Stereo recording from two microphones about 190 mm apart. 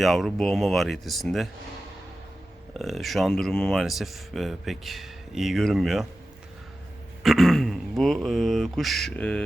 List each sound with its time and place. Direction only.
0.0 s speech: centre (ahead or behind)
2.7 s speech: centre (ahead or behind)
7.2 s speech: centre (ahead or behind)